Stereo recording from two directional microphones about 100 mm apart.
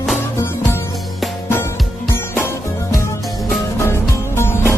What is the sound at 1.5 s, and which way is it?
Music, 30° left (ahead or behind).